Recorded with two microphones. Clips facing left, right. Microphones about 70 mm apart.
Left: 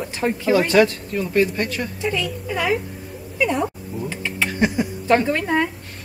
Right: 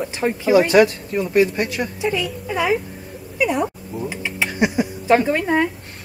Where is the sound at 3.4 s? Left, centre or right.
Centre.